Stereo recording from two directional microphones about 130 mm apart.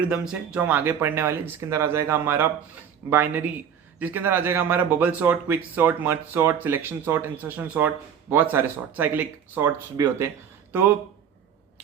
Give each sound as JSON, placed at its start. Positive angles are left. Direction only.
{"t": 0.0, "sound": "speech", "side_deg": -10}